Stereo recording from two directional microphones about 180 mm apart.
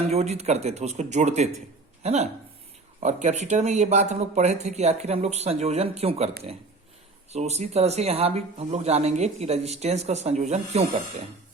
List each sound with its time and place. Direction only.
0.1 s speech: 35° right (ahead or behind)
7.3 s speech: 40° right (ahead or behind)